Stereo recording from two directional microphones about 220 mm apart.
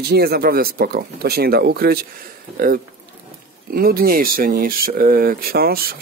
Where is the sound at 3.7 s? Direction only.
45° right (ahead or behind).